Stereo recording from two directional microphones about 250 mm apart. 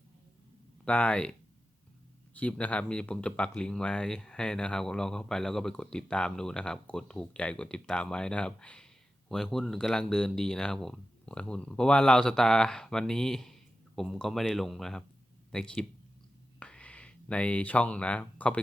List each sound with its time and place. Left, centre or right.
0.9 s speech: centre